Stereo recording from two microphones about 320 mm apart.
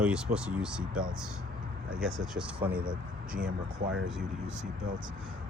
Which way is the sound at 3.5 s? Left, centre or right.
Right.